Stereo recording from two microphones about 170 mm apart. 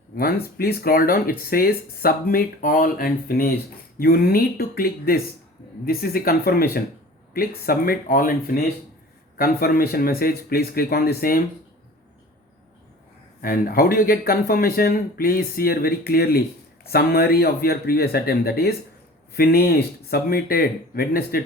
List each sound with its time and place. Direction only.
0.2 s speech: 65° left (ahead or behind)
13.4 s speech: 55° left (ahead or behind)